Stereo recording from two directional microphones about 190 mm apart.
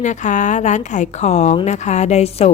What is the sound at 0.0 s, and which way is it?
A woman's voice, 40° left (ahead or behind).